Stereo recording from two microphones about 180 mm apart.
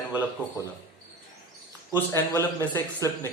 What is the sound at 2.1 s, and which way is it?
Speech, 15° left (ahead or behind).